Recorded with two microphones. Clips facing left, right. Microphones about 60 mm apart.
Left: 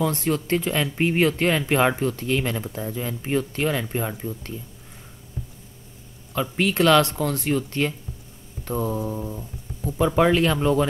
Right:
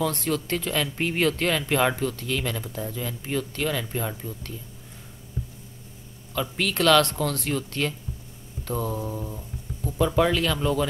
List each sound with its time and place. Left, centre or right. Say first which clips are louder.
0.0 s speech: left 3 dB; centre
6.3 s speech: left 4 dB; centre
9.3 s guitar: left 2 dB; centre
9.9 s speech: left 3 dB; left